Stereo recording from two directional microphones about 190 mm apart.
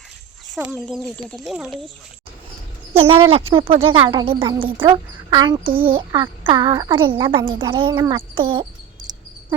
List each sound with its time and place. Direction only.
0.5 s speech: 5° right (ahead or behind)
3.0 s speech: 30° right (ahead or behind)
8.1 s cricket: 25° right (ahead or behind)